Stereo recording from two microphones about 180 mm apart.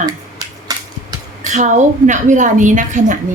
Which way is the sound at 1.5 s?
45° right (ahead or behind).